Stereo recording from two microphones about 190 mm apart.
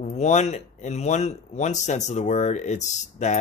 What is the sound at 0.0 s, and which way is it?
Speech, 35° left (ahead or behind).